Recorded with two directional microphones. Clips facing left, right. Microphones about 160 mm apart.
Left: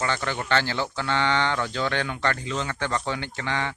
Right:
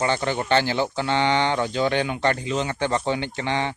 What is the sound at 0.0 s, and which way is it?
Speech, 20° right (ahead or behind).